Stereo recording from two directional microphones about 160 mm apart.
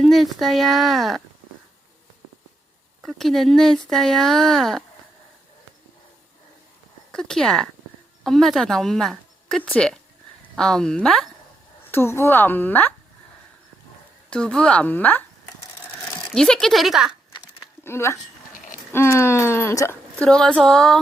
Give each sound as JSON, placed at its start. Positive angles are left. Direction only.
{"t": 0.0, "sound": "speech", "side_deg": 0}
{"t": 3.0, "sound": "speech", "side_deg": 0}
{"t": 7.1, "sound": "speech", "side_deg": 5}
{"t": 11.9, "sound": "speech", "side_deg": 15}
{"t": 14.3, "sound": "speech", "side_deg": 5}
{"t": 17.3, "sound": "a sound", "side_deg": 25}
{"t": 17.8, "sound": "speech", "side_deg": 15}
{"t": 18.5, "sound": "a sound", "side_deg": 55}
{"t": 18.9, "sound": "a woman's voice", "side_deg": 15}